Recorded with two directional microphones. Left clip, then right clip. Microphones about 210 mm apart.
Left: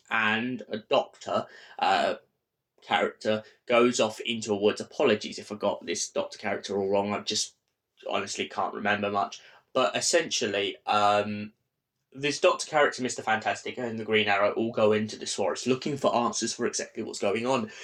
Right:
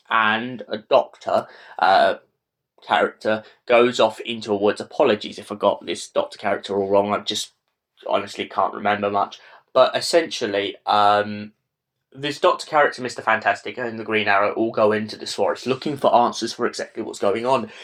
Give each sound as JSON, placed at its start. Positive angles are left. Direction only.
{"t": 0.1, "sound": "speech", "side_deg": -10}